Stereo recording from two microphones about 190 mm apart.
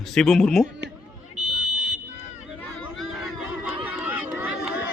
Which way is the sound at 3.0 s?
Centre (ahead or behind).